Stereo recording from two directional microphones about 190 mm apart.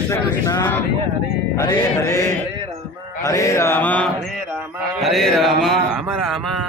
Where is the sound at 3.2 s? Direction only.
15° left (ahead or behind).